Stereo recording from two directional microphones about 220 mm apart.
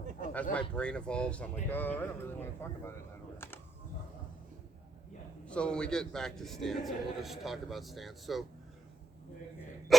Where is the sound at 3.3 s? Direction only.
10° left (ahead or behind).